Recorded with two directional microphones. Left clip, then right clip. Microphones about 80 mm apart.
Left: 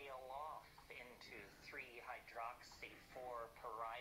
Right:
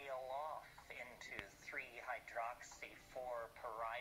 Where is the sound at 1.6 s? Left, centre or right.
Centre.